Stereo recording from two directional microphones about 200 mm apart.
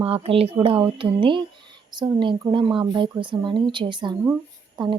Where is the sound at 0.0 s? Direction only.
30° right (ahead or behind).